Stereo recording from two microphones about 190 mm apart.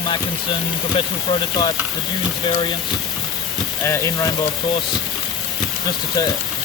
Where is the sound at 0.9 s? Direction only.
25° left (ahead or behind).